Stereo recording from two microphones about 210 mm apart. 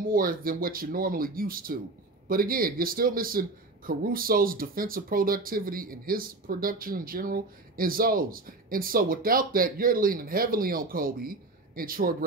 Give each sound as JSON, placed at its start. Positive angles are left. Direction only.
{"t": 0.0, "sound": "a man's voice", "side_deg": -40}